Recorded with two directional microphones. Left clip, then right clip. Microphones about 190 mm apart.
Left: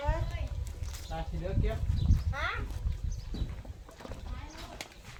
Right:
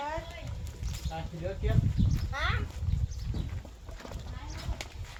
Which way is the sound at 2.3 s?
60° right (ahead or behind).